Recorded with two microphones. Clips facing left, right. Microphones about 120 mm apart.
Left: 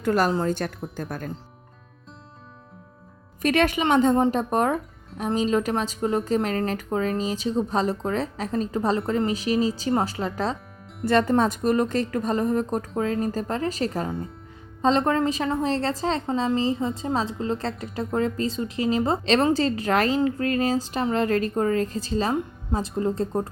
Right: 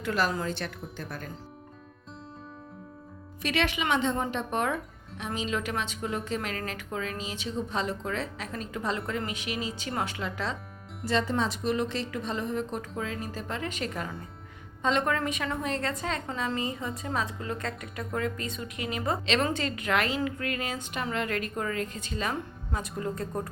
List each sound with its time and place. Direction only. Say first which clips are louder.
0.0 s a woman's voice: left 7 dB; 45° left (ahead or behind)
3.4 s speech: left 8 dB; 45° left (ahead or behind)
11.0 s a woman's voice: left 8 dB; 55° left (ahead or behind); by 23.5 s 30° left (ahead or behind)